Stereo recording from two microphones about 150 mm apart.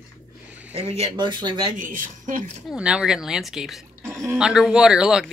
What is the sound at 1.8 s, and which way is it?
Speech, 60° right (ahead or behind).